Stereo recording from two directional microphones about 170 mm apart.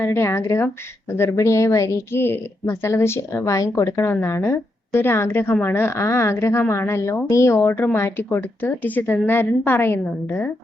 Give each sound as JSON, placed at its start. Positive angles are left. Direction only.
{"t": 0.0, "sound": "a woman's voice", "side_deg": 15}